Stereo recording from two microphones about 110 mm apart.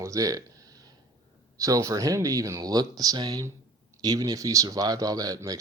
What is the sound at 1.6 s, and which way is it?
Speech, 30° right (ahead or behind).